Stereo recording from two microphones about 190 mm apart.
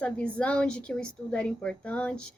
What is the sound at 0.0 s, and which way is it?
A woman's voice, 5° left (ahead or behind).